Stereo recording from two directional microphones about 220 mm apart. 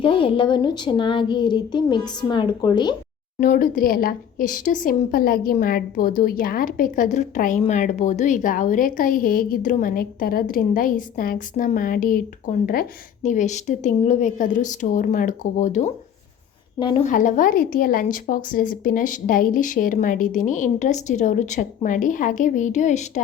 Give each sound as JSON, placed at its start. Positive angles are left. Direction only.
{"t": 0.0, "sound": "speech", "side_deg": 25}
{"t": 3.4, "sound": "speech", "side_deg": 40}
{"t": 16.8, "sound": "speech", "side_deg": 25}
{"t": 17.1, "sound": "speech", "side_deg": 35}